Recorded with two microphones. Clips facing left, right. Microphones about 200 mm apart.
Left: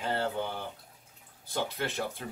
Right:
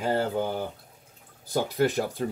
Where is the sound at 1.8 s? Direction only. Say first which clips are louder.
Right 11 dB; 45° right (ahead or behind).